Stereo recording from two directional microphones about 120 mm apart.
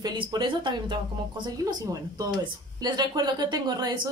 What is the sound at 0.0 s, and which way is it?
Speech, 35° right (ahead or behind).